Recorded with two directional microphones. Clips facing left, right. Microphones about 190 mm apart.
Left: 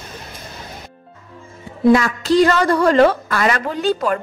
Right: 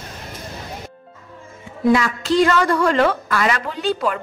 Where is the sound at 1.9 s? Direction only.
45° left (ahead or behind).